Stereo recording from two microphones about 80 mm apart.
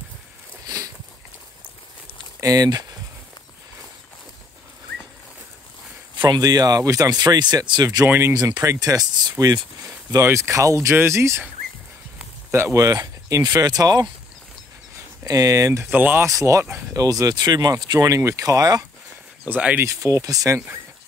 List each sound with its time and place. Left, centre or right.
2.4 s speech: right
6.1 s speech: right
10.2 s speech: right
12.4 s a sound: right
12.7 s speech: right
15.2 s speech: right
15.8 s speech: right
16.2 s speech: right
18.0 s speech: right
19.4 s speech: centre
19.8 s speech: right